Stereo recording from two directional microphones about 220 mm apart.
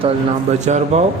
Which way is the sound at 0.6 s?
30° right (ahead or behind).